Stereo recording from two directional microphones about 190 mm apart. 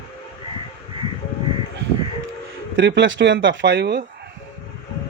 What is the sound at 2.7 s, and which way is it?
Speech, 70° right (ahead or behind).